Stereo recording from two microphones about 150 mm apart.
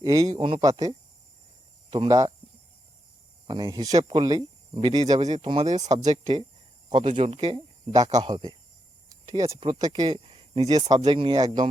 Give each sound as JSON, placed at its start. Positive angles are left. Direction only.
{"t": 0.0, "sound": "speech", "side_deg": -25}
{"t": 1.9, "sound": "speech", "side_deg": -35}
{"t": 3.4, "sound": "speech", "side_deg": -30}
{"t": 5.2, "sound": "speech", "side_deg": -50}
{"t": 7.1, "sound": "speech", "side_deg": -40}
{"t": 9.0, "sound": "a sound", "side_deg": -25}
{"t": 9.6, "sound": "speech", "side_deg": -30}
{"t": 10.7, "sound": "speech", "side_deg": -25}